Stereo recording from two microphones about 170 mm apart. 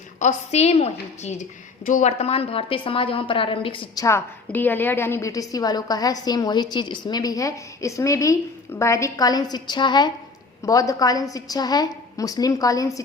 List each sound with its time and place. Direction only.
0.2 s a woman's voice: 40° left (ahead or behind)
4.0 s a woman's voice: 15° left (ahead or behind)